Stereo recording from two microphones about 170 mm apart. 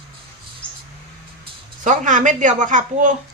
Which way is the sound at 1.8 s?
50° right (ahead or behind).